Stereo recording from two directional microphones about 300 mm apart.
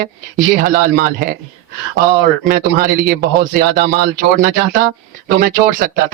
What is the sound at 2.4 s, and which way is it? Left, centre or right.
A man's voice, right.